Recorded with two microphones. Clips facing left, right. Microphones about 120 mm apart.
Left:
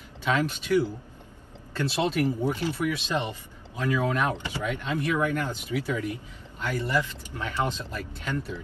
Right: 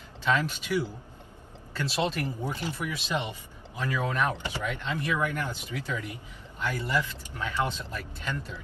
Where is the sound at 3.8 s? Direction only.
15° left (ahead or behind).